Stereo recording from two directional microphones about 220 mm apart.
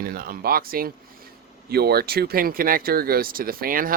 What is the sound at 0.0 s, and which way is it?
Speech, 40° right (ahead or behind).